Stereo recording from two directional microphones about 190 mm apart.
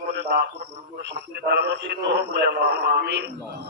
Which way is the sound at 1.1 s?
60° right (ahead or behind).